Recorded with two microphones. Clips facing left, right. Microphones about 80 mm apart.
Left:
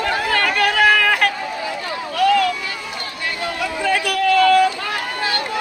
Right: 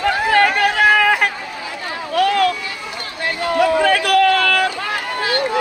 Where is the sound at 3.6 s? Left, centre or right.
Right.